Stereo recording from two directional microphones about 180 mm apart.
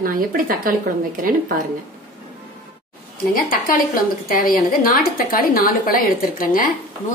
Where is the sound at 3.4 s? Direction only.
50° left (ahead or behind).